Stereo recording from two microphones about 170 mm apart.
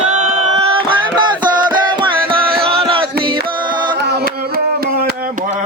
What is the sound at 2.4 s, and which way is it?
Music, 60° right (ahead or behind).